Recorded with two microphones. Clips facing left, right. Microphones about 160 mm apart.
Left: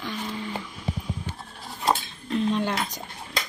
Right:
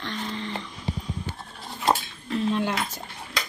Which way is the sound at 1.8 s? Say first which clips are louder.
Right 1 dB; centre (ahead or behind).